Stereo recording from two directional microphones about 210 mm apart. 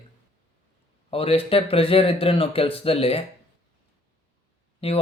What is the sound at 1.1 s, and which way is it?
Speech, 25° left (ahead or behind).